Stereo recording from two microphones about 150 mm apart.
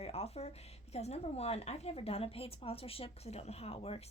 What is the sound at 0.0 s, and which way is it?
A woman's voice, 45° left (ahead or behind).